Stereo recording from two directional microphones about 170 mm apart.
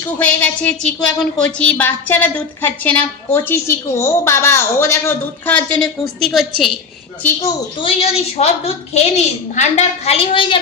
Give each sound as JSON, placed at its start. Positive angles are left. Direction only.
{"t": 0.2, "sound": "a woman's voice", "side_deg": 10}
{"t": 7.4, "sound": "a woman's voice", "side_deg": 30}